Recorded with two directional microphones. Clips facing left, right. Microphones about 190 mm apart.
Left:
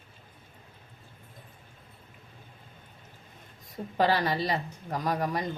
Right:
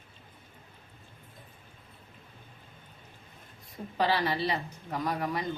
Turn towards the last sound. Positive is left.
turn(degrees=40)  # may be behind; listen again after turning